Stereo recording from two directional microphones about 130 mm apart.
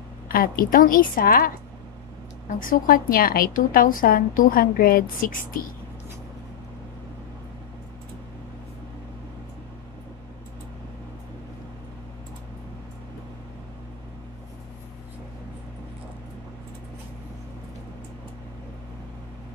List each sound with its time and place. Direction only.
0.3 s a woman's voice: 90° left
2.6 s a woman's voice: 90° left